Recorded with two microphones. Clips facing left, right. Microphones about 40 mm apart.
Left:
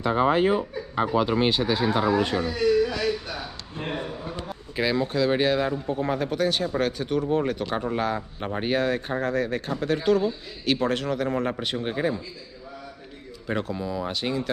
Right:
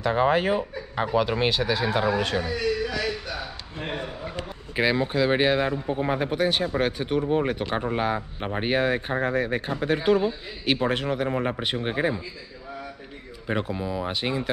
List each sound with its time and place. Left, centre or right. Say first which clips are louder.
0.1 s speech: left 1 dB; centre
4.7 s speech: right 1 dB; right
13.5 s speech: right 1 dB; centre